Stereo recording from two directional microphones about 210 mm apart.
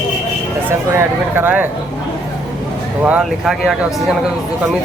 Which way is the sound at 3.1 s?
5° right (ahead or behind).